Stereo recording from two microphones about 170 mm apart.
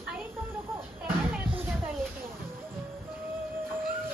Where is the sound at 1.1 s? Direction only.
10° right (ahead or behind).